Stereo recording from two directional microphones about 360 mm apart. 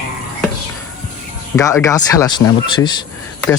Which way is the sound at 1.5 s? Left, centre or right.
Centre.